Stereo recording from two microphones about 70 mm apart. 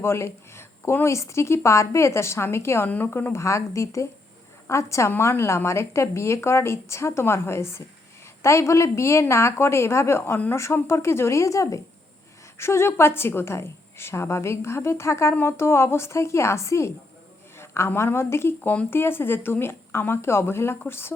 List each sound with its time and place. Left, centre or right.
0.0 s a woman's voice: left
12.5 s a woman's voice: left